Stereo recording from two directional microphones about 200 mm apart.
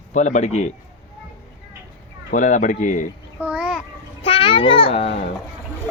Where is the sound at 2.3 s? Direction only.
40° left (ahead or behind).